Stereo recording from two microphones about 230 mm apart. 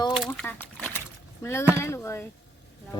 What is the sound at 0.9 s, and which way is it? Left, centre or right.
Splash, centre.